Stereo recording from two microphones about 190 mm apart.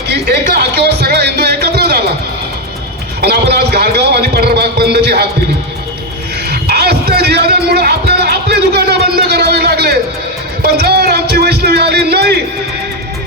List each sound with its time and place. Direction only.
0.1 s music: 60° right (ahead or behind)
3.2 s a man's voice: 60° right (ahead or behind)
6.5 s music: 55° right (ahead or behind)
10.6 s a sound: 60° right (ahead or behind)